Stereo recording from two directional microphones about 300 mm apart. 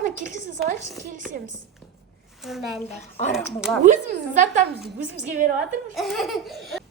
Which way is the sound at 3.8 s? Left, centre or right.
Right.